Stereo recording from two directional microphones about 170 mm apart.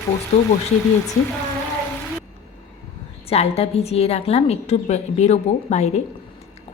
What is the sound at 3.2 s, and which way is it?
A woman's voice, 35° left (ahead or behind).